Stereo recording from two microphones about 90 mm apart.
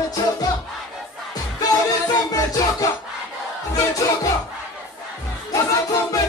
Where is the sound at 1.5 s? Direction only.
40° left (ahead or behind).